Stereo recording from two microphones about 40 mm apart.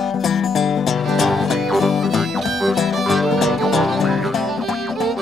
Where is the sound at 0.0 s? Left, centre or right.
Centre.